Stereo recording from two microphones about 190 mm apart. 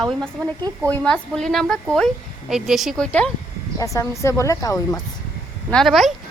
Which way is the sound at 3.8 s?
15° left (ahead or behind).